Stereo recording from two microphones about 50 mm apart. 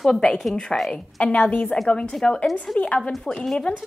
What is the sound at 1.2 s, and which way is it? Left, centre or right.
A woman's voice, left.